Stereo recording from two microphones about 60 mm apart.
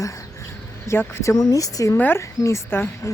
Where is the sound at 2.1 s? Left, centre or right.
Left.